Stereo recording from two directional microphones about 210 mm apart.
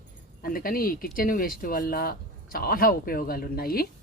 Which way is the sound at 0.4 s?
45° left (ahead or behind).